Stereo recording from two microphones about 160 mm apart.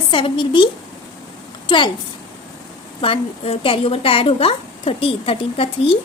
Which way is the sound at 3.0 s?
35° left (ahead or behind).